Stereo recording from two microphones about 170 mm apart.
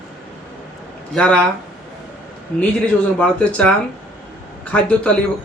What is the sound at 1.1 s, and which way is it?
Speech, 5° left (ahead or behind).